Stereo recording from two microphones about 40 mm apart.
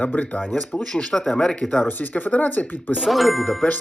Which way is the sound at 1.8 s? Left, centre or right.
Left.